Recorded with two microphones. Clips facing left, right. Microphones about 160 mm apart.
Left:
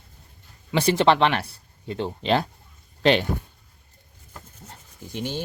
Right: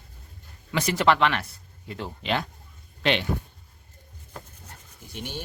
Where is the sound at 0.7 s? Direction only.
30° left (ahead or behind).